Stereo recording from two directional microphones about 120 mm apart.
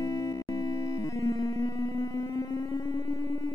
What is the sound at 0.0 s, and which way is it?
Music, 25° left (ahead or behind).